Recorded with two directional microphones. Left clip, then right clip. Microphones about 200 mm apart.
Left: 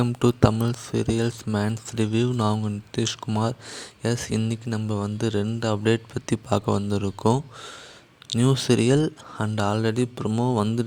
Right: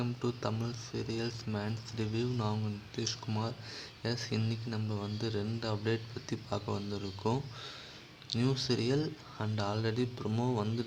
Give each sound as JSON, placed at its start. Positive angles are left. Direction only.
{"t": 0.0, "sound": "speech", "side_deg": 45}
{"t": 8.4, "sound": "speech", "side_deg": 40}